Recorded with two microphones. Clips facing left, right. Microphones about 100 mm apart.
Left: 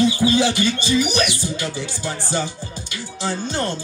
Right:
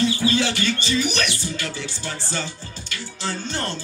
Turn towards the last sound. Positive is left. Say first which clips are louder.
# left 4 dB
turn(degrees=15)  # may be behind; listen again after turning